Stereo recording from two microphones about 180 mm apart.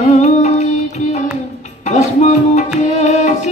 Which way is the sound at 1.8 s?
35° left (ahead or behind).